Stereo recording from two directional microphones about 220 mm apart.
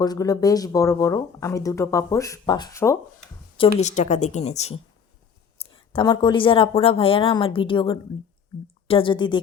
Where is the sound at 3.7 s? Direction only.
30° left (ahead or behind).